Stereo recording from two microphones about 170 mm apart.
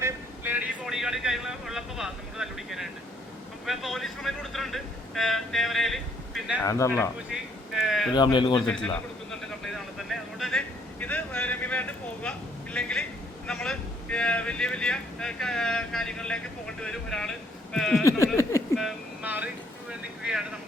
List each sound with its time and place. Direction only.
0.0 s vehicle: 10° right (ahead or behind)
3.7 s a man's voice: centre (ahead or behind)
6.7 s speech: 15° left (ahead or behind)
7.7 s speech: centre (ahead or behind)
8.1 s speech: 25° left (ahead or behind)
8.6 s speech: 5° left (ahead or behind)